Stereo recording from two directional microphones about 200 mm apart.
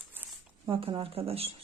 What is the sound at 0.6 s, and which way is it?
Speech, 25° right (ahead or behind).